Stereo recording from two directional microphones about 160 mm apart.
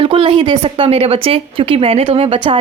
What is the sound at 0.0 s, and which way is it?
A woman's voice, 35° right (ahead or behind).